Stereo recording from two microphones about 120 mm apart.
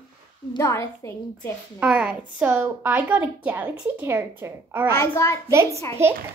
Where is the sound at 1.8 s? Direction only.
10° right (ahead or behind).